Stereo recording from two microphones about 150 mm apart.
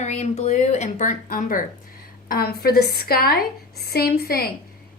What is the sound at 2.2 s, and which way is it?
A woman's voice, 90° left.